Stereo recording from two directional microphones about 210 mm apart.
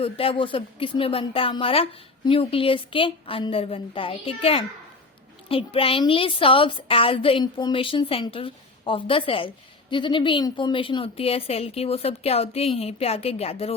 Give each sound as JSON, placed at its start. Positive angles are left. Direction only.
{"t": 0.0, "sound": "a woman's voice", "side_deg": 25}